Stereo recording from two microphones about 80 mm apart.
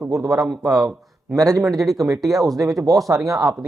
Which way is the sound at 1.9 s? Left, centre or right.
Right.